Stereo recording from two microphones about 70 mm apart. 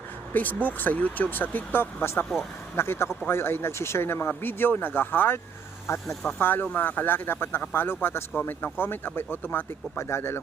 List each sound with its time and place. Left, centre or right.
0.3 s speech: left
5.9 s speech: left
6.4 s speech: left